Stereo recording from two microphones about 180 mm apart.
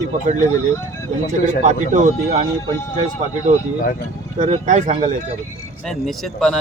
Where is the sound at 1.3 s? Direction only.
45° right (ahead or behind).